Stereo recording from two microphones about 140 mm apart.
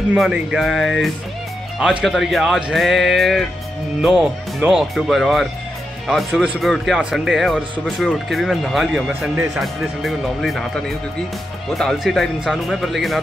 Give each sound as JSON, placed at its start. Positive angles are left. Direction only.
{"t": 0.1, "sound": "speech", "side_deg": -5}